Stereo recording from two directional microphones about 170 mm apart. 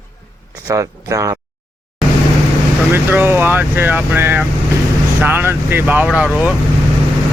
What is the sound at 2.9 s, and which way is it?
Speech, 15° right (ahead or behind).